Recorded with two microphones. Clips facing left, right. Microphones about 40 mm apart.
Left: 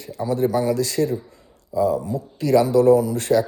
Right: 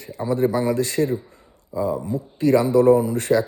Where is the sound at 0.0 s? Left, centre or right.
Right.